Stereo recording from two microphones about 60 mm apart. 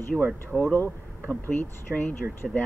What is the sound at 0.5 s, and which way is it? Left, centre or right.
Speech, left.